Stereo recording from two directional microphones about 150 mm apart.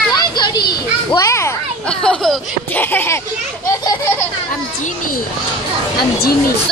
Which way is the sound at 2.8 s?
15° left (ahead or behind).